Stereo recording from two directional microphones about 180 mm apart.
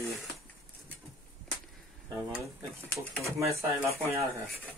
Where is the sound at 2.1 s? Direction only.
15° right (ahead or behind).